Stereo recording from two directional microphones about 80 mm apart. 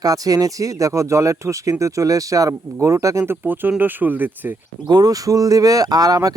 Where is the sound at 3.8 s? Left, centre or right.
Right.